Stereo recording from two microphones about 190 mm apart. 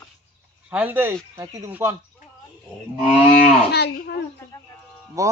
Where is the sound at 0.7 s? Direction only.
10° right (ahead or behind).